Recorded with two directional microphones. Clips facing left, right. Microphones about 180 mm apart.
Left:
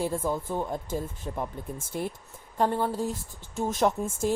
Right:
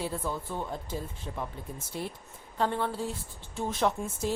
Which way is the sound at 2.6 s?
40° left (ahead or behind).